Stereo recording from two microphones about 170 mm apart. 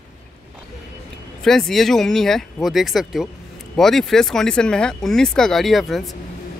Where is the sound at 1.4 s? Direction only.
Centre (ahead or behind).